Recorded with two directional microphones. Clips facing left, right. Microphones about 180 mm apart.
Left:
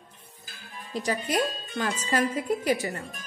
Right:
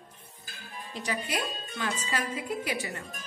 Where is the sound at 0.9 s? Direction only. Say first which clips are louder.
Left 5 dB; 40° left (ahead or behind).